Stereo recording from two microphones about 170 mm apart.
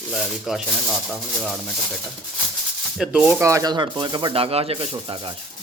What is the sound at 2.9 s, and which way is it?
Speech, 5° right (ahead or behind).